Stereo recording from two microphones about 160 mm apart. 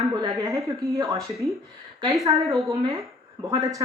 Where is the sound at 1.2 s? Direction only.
Centre (ahead or behind).